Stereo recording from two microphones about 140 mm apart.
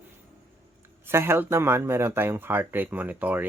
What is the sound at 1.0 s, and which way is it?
Speech, 15° right (ahead or behind).